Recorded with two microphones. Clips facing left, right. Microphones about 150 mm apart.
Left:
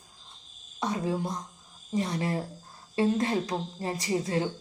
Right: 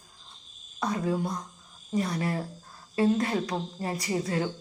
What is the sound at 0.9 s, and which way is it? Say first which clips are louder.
A woman's voice: right 2 dB; 25° left (ahead or behind).